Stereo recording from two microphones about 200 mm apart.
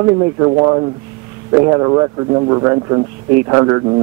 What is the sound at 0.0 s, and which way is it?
Speech, 25° right (ahead or behind).